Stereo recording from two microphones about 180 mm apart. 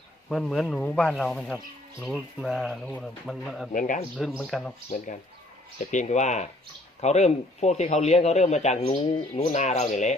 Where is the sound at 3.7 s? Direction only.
45° left (ahead or behind).